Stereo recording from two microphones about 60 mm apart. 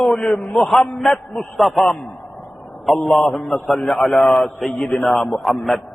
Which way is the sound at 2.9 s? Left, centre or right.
Centre.